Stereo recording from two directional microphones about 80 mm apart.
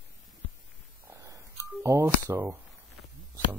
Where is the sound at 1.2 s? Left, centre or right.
Right.